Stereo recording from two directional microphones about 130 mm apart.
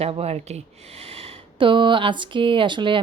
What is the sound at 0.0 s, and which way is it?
Speech, 50° right (ahead or behind).